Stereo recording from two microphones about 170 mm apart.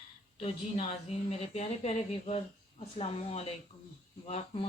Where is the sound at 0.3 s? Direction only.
35° left (ahead or behind).